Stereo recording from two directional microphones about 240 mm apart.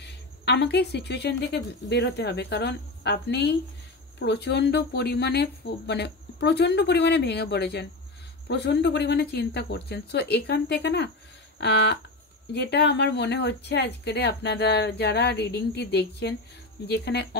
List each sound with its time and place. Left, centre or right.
0.0 s speech: left
11.5 s a sound: left
12.5 s speech: left